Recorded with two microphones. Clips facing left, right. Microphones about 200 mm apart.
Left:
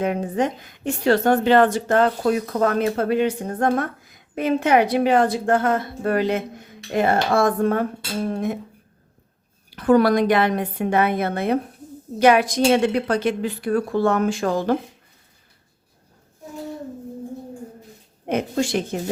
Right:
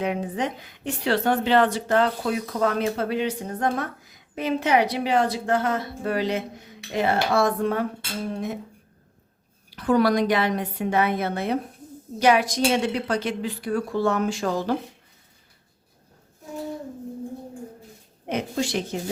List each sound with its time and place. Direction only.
0.0 s a woman's voice: 45° left (ahead or behind)
9.6 s a woman's voice: 55° left (ahead or behind)
18.3 s a woman's voice: 50° left (ahead or behind)